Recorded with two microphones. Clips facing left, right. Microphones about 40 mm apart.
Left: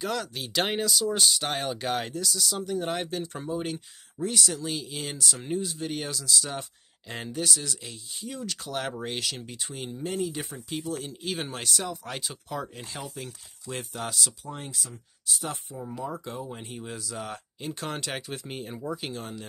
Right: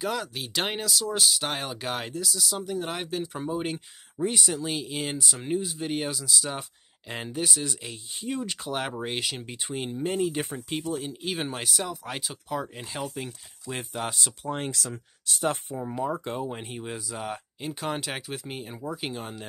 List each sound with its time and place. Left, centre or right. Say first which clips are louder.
0.0 s speech: right 1 dB; centre
3.4 s speech: right 1 dB; centre; by 10.9 s right
10.9 s speech: right 1 dB; centre
12.6 s speech: right 4 dB; centre
14.4 s speech: right 7 dB; right
14.7 s speech: right 5 dB; right
15.4 s speech: right 12 dB; right; by 18.8 s centre
18.9 s speech: right 2 dB; centre